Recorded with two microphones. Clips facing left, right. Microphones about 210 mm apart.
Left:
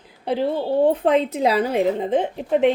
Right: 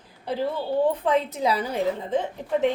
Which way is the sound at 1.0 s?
90° left.